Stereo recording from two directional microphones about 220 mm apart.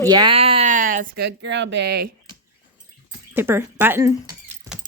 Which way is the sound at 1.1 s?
50° right (ahead or behind).